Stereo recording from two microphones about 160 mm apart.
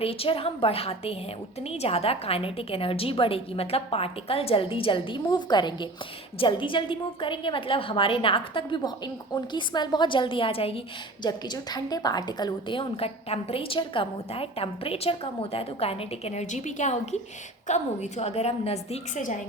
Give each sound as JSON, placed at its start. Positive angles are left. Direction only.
{"t": 0.0, "sound": "a woman's voice", "side_deg": 35}
{"t": 11.2, "sound": "a woman's voice", "side_deg": 25}